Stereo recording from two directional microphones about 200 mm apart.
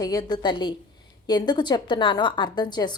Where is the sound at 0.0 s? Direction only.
20° left (ahead or behind).